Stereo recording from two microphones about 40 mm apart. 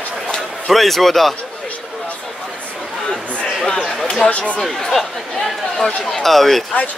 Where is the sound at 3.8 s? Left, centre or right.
Centre.